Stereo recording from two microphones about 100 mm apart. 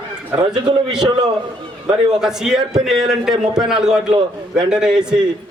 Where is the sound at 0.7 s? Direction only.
45° right (ahead or behind).